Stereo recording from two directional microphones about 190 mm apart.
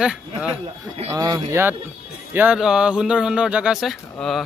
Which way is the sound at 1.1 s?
20° right (ahead or behind).